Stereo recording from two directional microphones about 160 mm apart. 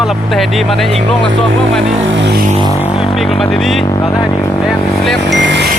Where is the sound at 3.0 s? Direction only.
Centre (ahead or behind).